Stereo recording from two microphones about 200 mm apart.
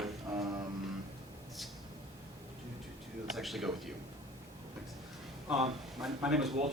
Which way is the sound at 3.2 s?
Centre (ahead or behind).